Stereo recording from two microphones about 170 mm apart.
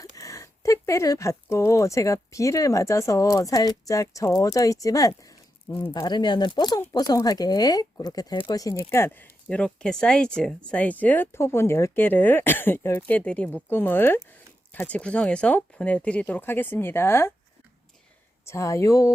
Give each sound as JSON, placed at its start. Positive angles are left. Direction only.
{"t": 0.0, "sound": "speech", "side_deg": 20}
{"t": 5.9, "sound": "speech", "side_deg": 25}
{"t": 18.4, "sound": "speech", "side_deg": 15}